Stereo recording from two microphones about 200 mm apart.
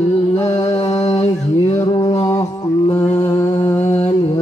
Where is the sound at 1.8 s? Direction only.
20° left (ahead or behind).